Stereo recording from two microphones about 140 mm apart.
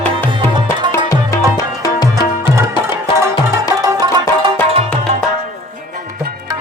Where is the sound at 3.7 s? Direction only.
25° right (ahead or behind).